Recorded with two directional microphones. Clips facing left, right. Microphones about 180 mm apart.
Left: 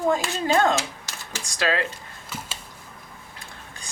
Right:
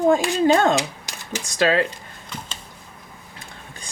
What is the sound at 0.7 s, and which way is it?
Speech, 15° right (ahead or behind).